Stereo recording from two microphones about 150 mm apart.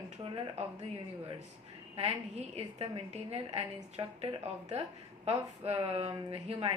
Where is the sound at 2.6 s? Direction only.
45° right (ahead or behind).